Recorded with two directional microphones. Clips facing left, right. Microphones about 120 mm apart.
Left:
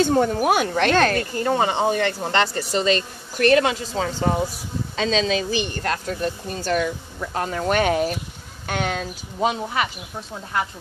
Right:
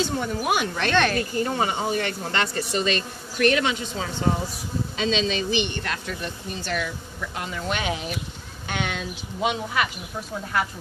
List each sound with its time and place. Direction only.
0.0 s speech: 45° left (ahead or behind)